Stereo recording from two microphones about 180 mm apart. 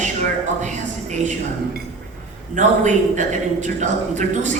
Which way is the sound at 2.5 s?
45° right (ahead or behind).